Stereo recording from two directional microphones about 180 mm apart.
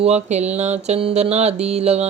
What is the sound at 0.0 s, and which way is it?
Mantra, 40° right (ahead or behind).